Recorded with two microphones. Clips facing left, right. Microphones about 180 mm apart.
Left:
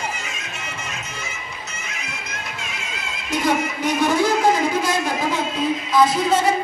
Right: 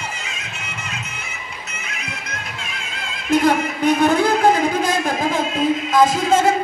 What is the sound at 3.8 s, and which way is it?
Speech, 55° right (ahead or behind).